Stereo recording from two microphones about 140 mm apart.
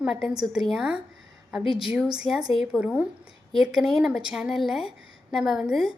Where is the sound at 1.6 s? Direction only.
40° left (ahead or behind).